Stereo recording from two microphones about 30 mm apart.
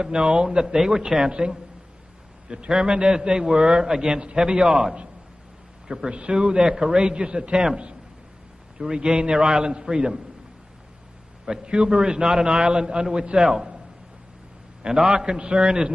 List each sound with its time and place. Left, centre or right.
0.0 s a man's voice: right
0.7 s a man's voice: centre
2.4 s a man's voice: right
3.3 s a man's voice: right
4.6 s a man's voice: right
6.0 s a man's voice: right
8.9 s a man's voice: right
11.6 s a man's voice: right
14.8 s a man's voice: right